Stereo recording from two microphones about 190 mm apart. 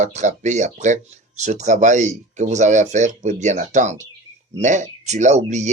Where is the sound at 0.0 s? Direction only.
40° right (ahead or behind).